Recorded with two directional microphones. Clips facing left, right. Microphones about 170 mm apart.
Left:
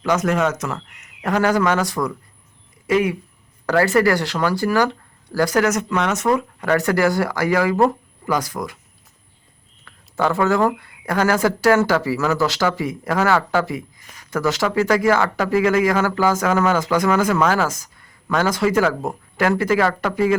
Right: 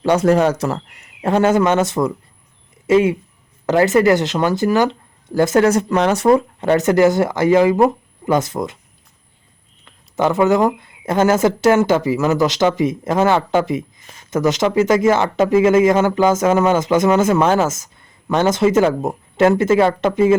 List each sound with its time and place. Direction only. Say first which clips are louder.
0.0 s speech: right 5 dB; 30° right (ahead or behind)
9.8 s speech: right 3 dB; 20° right (ahead or behind)